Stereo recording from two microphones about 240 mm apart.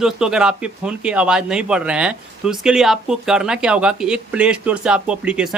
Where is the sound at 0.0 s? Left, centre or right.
Centre.